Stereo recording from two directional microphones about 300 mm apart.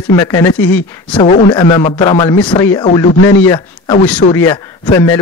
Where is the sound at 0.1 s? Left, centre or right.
Centre.